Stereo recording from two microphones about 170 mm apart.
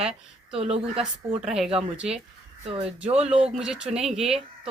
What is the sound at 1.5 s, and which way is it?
Speech, 5° right (ahead or behind).